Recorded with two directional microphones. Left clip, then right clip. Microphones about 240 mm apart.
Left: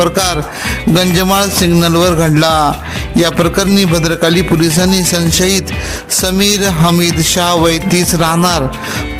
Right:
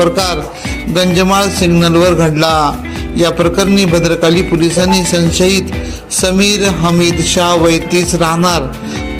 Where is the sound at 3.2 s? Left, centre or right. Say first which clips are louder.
Right 3 dB; left.